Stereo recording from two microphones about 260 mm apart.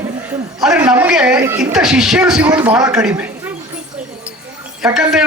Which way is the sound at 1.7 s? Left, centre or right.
Centre.